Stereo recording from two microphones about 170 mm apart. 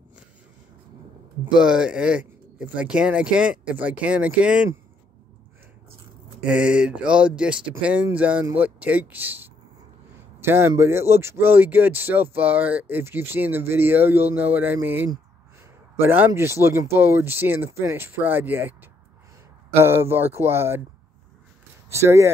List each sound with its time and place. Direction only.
1.4 s speech: 5° right (ahead or behind)
6.4 s speech: 5° right (ahead or behind)
21.8 s speech: 15° right (ahead or behind)